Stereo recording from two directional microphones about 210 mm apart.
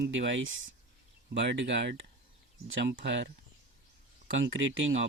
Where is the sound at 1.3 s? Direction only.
55° right (ahead or behind).